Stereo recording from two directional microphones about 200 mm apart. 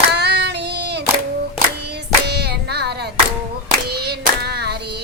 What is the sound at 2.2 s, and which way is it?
Music, 55° right (ahead or behind).